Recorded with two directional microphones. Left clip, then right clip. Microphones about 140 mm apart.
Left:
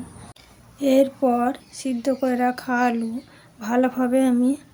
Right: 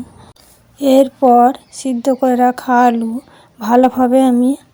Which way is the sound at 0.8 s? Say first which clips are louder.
Right 8 dB; 45° right (ahead or behind).